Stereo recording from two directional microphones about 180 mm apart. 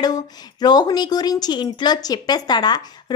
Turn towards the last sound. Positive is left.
turn(degrees=25)  # may be behind; listen again after turning